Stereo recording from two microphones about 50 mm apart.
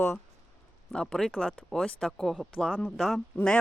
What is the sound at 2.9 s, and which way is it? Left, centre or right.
Speech, centre.